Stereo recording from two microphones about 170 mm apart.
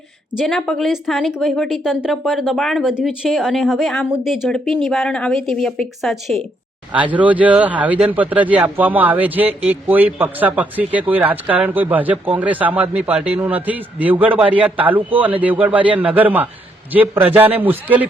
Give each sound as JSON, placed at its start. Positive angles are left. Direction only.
{"t": 0.3, "sound": "speech", "side_deg": 0}